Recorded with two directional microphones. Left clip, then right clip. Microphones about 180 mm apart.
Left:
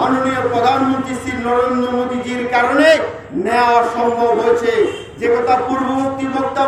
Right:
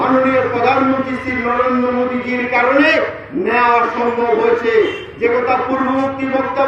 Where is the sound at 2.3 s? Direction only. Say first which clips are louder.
Right 1 dB; 25° left (ahead or behind).